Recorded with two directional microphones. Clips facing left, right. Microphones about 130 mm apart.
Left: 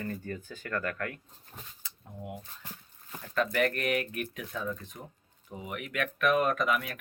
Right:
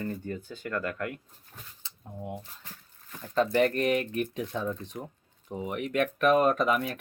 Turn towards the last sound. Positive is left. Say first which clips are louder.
# right 4 dB
turn(degrees=-35)  # may be behind; listen again after turning